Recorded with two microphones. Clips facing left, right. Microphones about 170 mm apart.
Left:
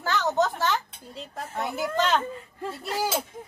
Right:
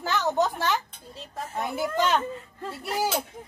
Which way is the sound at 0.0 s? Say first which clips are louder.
Even; 15° right (ahead or behind).